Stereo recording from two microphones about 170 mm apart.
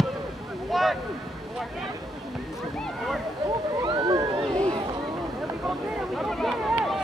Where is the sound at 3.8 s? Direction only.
25° right (ahead or behind).